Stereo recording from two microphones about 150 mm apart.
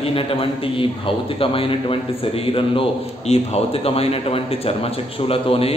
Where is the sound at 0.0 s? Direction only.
40° left (ahead or behind).